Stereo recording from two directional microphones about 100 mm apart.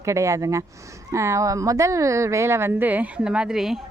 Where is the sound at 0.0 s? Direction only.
30° right (ahead or behind).